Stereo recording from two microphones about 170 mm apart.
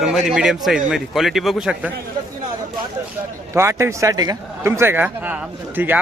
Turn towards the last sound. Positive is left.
turn(degrees=-10)  # may be behind; listen again after turning